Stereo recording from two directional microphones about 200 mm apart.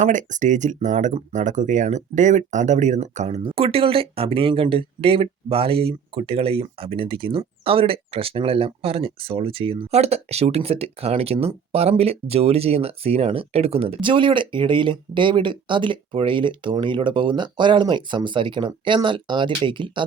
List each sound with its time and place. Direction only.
0.0 s speech: 40° right (ahead or behind)